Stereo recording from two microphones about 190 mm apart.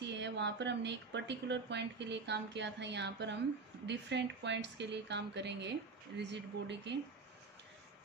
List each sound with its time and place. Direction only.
0.0 s speech: 65° right (ahead or behind)